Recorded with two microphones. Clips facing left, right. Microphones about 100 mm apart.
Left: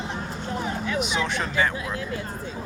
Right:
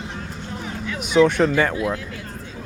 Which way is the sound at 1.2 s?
55° right (ahead or behind).